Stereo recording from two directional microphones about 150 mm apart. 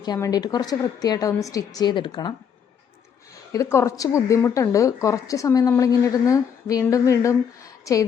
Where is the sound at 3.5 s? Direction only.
20° left (ahead or behind).